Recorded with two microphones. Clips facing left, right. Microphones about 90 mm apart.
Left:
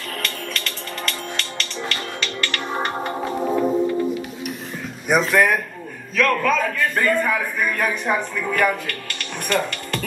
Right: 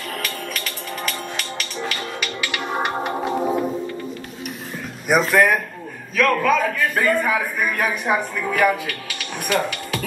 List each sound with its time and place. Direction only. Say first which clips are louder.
0.2 s music: even; 5° right (ahead or behind)
5.0 s a man's voice: right 1 dB; centre (ahead or behind)